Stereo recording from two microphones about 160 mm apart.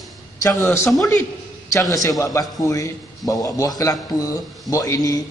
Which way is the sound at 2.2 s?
20° left (ahead or behind).